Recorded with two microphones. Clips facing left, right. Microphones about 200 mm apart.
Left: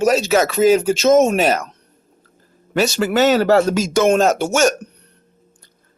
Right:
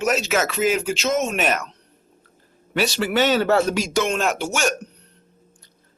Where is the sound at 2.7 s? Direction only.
45° left (ahead or behind).